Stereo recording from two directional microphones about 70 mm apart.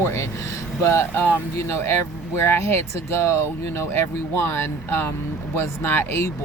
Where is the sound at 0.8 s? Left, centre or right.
Left.